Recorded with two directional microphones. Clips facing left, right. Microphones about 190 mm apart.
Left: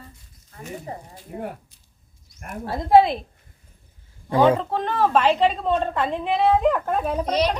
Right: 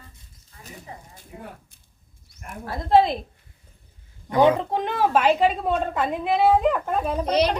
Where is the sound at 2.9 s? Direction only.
5° left (ahead or behind).